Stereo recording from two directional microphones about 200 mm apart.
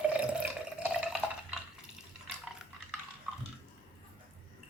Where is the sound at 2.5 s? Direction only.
Centre (ahead or behind).